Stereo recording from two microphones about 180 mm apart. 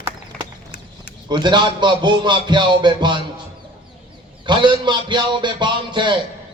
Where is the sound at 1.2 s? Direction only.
25° right (ahead or behind).